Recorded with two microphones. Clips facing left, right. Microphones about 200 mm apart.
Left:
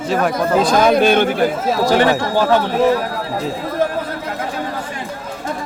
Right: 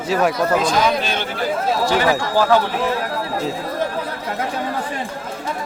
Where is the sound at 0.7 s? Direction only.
50° left (ahead or behind).